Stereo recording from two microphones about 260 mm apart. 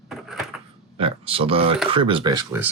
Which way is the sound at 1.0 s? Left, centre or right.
Right.